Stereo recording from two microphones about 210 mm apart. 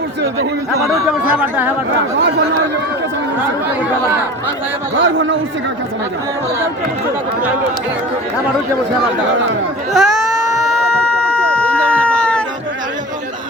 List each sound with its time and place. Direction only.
1.4 s speech: 10° right (ahead or behind)
2.1 s speech: 60° right (ahead or behind)
4.9 s speech: 65° right (ahead or behind)
9.9 s baby cry: centre (ahead or behind)